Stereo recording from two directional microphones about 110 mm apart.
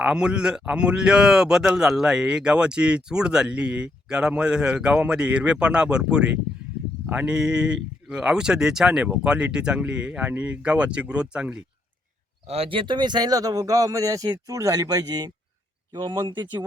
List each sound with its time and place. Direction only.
0.0 s speech: 5° right (ahead or behind)
12.5 s speech: 60° right (ahead or behind); by 16.6 s 40° right (ahead or behind)